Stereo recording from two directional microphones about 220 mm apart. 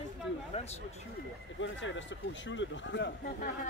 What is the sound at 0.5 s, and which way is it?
Speech, 30° left (ahead or behind).